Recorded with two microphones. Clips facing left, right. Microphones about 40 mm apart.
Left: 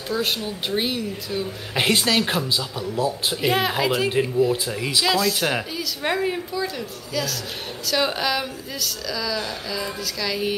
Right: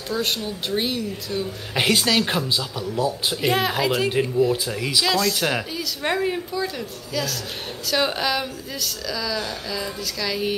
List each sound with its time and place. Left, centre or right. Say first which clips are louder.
0.1 s speech: even; centre
7.8 s speech: even; centre